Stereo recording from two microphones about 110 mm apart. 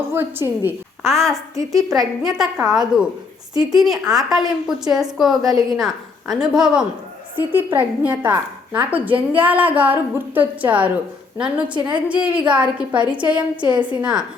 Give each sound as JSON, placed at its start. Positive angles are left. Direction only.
{"t": 0.1, "sound": "a woman's voice", "side_deg": -20}
{"t": 1.0, "sound": "a woman's voice", "side_deg": 5}
{"t": 5.4, "sound": "a woman's voice", "side_deg": -35}
{"t": 5.7, "sound": "a woman's voice", "side_deg": 0}
{"t": 7.3, "sound": "a woman's voice", "side_deg": -15}